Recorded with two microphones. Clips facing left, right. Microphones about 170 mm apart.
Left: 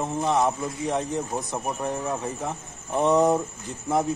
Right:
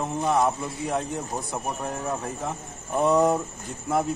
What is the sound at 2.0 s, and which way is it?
Speech, 10° left (ahead or behind).